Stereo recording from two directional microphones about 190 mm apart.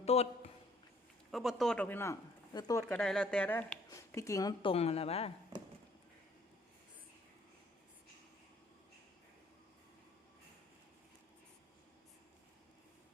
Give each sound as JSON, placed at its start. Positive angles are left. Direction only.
{"t": 0.0, "sound": "a sound", "side_deg": 35}
{"t": 1.3, "sound": "speech", "side_deg": 0}
{"t": 3.0, "sound": "speech", "side_deg": 5}